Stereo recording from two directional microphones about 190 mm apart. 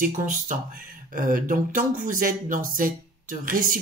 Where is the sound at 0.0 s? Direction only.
45° right (ahead or behind).